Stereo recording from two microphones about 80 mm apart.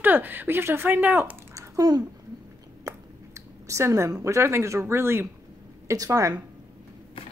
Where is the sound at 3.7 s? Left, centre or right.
Right.